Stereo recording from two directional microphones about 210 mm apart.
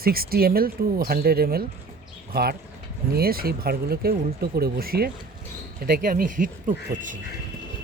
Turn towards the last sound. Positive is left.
turn(degrees=-40)  # may be behind; listen again after turning